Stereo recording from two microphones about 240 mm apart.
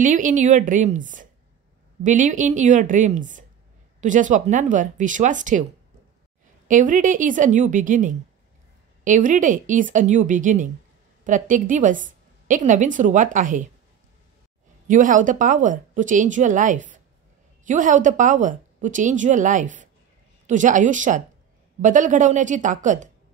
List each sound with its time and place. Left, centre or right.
0.0 s speech: right
6.7 s a woman's voice: right
14.9 s speech: right